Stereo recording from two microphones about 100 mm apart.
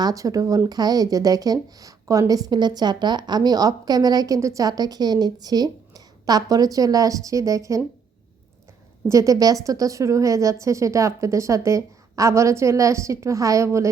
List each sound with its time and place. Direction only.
0.0 s speech: 35° right (ahead or behind)
9.0 s speech: 35° right (ahead or behind)